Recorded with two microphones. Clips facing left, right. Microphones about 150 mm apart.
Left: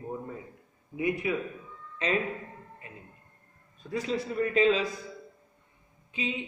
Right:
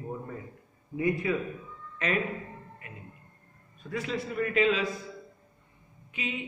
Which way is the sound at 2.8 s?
30° left (ahead or behind).